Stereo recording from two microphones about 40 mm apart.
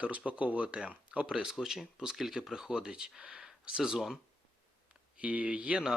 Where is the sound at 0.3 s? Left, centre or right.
Right.